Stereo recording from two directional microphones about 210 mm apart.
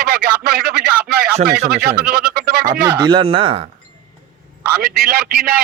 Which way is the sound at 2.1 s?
50° right (ahead or behind).